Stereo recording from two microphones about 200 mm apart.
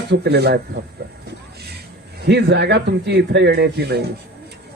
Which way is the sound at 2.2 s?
55° right (ahead or behind).